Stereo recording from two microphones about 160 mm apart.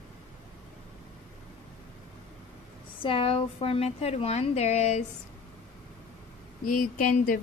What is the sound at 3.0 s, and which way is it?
A woman's voice, 35° left (ahead or behind).